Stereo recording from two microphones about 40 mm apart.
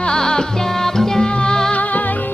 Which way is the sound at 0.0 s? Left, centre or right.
Centre.